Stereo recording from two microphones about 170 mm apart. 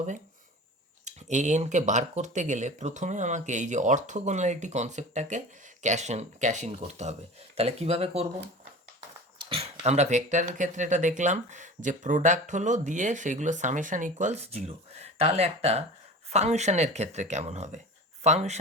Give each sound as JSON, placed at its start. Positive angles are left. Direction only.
{"t": 1.0, "sound": "speech", "side_deg": -45}
{"t": 9.5, "sound": "speech", "side_deg": -35}